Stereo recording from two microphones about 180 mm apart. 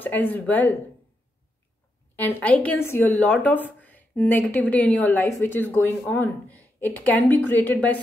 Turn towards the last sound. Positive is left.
turn(degrees=10)  # may be behind; listen again after turning